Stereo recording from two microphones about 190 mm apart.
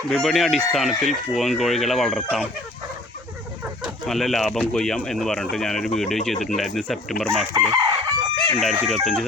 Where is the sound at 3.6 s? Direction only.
5° right (ahead or behind).